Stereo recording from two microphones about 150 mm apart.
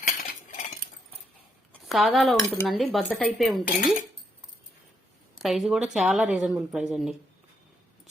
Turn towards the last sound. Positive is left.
turn(degrees=-5)  # may be behind; listen again after turning